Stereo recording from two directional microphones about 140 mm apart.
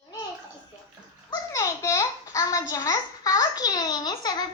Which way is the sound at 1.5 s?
20° left (ahead or behind).